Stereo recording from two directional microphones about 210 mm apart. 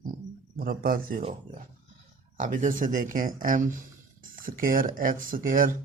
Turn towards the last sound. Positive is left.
turn(degrees=-40)  # may be behind; listen again after turning